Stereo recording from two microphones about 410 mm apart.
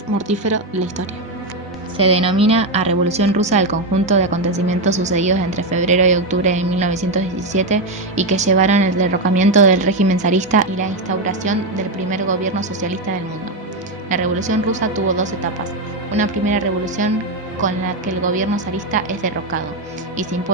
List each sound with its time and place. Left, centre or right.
2.0 s a woman's voice: centre
14.1 s a woman's voice: centre